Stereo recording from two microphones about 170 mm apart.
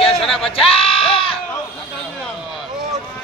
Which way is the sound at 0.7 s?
35° left (ahead or behind).